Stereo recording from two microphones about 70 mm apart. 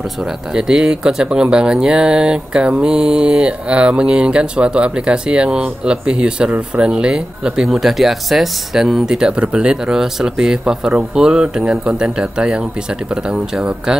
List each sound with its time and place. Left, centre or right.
0.6 s speech: centre